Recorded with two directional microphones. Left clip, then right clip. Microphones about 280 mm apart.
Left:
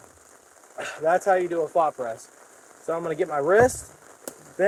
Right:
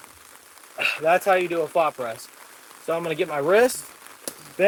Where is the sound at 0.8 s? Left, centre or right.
Right.